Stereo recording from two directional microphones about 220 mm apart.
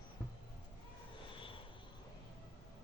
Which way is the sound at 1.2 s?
25° left (ahead or behind).